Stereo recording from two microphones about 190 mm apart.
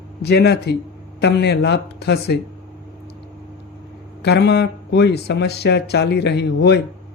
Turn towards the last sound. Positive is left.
turn(degrees=60)  # may be behind; listen again after turning